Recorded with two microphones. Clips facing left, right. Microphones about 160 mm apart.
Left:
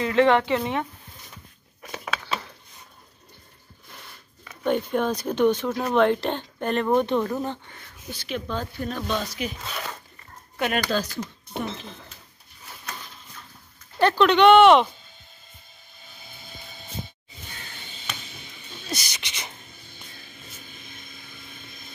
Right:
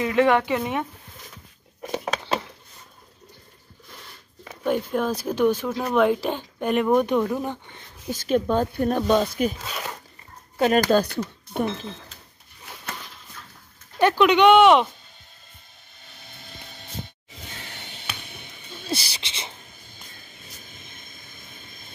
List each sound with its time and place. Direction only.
0.0 s speech: 15° right (ahead or behind)
4.6 s speech: 5° right (ahead or behind)
8.1 s speech: 45° right (ahead or behind)
9.6 s zipper: 5° right (ahead or behind)
10.6 s speech: 40° right (ahead or behind)
13.9 s speech: 15° right (ahead or behind)
17.6 s a sound: 70° right (ahead or behind)
18.9 s speech: 30° right (ahead or behind)